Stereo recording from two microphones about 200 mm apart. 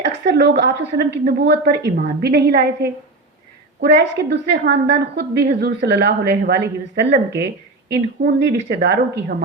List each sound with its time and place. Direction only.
0.0 s a woman's voice: 60° right (ahead or behind)